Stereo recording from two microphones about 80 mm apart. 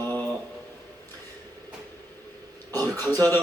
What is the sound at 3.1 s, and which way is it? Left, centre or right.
Speech, right.